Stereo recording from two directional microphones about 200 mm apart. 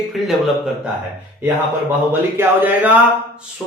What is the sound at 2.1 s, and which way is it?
Speech, 10° right (ahead or behind).